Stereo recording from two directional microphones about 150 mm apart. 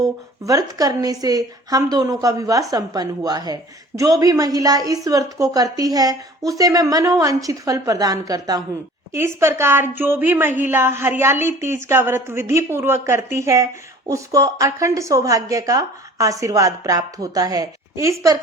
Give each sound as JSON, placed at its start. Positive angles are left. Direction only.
{"t": 0.0, "sound": "a woman's voice", "side_deg": -25}